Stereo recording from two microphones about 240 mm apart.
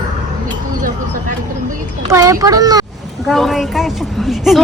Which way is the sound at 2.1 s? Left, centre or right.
Centre.